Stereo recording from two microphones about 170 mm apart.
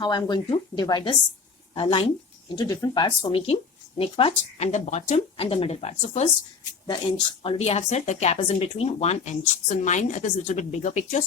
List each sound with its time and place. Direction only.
0.0 s a woman's voice: 25° left (ahead or behind)
3.4 s speech: 35° left (ahead or behind)
7.4 s speech: 35° left (ahead or behind)